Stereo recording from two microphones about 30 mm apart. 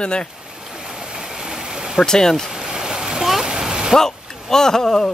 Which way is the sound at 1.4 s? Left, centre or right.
Right.